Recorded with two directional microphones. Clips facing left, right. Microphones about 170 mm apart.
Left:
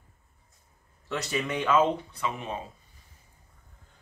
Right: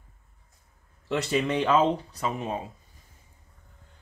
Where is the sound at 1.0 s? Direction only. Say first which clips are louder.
Right 5 dB; 25° right (ahead or behind).